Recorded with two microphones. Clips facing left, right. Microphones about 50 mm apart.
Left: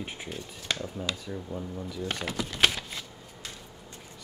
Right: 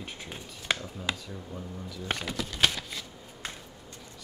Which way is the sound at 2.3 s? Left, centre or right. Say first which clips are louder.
Left 2 dB; centre.